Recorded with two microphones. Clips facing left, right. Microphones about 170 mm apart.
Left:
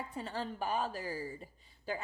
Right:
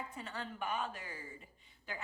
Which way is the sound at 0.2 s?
35° left (ahead or behind).